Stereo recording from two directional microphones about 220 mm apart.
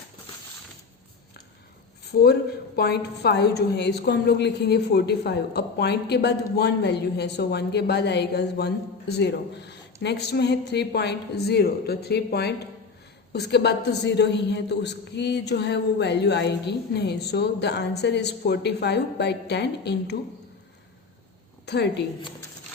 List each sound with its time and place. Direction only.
2.0 s a woman's voice: 45° left (ahead or behind)
21.7 s a woman's voice: 50° left (ahead or behind)